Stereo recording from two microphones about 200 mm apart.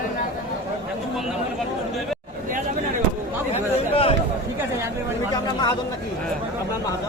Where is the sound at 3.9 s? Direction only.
25° left (ahead or behind).